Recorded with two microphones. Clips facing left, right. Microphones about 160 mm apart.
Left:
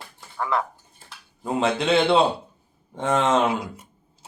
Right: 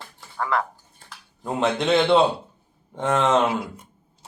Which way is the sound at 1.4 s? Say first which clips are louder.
Even; 5° left (ahead or behind).